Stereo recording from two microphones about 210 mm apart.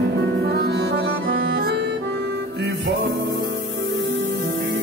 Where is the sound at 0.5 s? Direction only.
55° right (ahead or behind).